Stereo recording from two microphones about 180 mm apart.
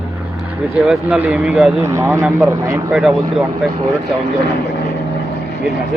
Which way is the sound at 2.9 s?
5° right (ahead or behind).